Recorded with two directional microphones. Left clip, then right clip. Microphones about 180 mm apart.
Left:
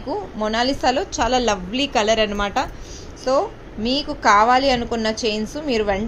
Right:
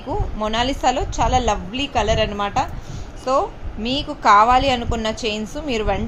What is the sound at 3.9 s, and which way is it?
A woman's voice, 5° left (ahead or behind).